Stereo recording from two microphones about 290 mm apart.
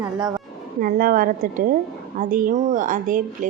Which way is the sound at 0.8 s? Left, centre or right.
Right.